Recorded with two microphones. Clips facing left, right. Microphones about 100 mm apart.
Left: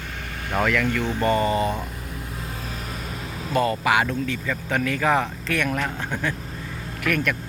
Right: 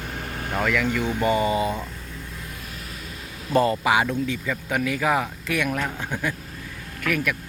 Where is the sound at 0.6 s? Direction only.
5° right (ahead or behind).